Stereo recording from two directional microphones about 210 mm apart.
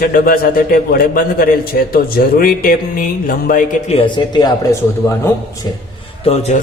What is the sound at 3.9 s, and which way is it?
A man's voice, 25° left (ahead or behind).